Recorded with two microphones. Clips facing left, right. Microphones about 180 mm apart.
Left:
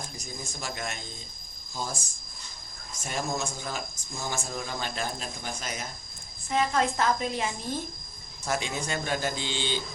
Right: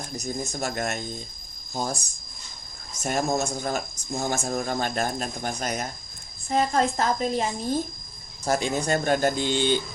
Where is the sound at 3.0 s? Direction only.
50° right (ahead or behind).